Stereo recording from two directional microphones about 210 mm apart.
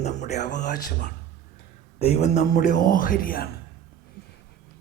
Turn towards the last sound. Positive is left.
turn(degrees=40)  # may be behind; listen again after turning